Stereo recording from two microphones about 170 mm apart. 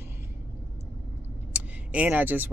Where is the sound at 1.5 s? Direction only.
10° right (ahead or behind).